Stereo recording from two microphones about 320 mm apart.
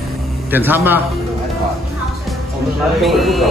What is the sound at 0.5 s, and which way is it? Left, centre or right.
Speech, centre.